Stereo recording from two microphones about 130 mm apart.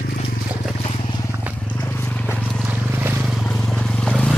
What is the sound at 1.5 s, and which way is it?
Vehicle, 15° left (ahead or behind).